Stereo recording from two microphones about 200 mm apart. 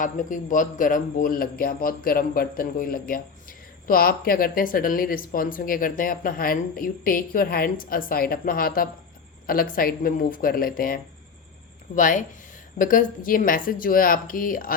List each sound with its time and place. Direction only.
0.0 s speech: 40° left (ahead or behind)